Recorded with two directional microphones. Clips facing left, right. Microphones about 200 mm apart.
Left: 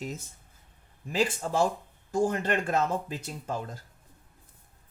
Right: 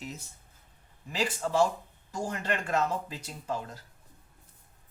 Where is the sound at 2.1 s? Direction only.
50° left (ahead or behind).